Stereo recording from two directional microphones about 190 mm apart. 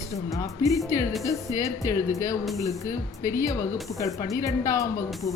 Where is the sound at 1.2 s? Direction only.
15° left (ahead or behind).